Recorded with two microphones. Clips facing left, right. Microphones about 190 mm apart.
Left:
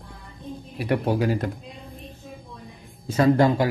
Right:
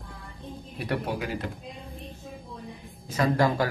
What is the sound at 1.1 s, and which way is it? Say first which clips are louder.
Speech: left 8 dB; 40° left (ahead or behind).